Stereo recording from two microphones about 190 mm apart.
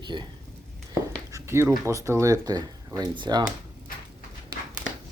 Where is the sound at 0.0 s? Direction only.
25° right (ahead or behind).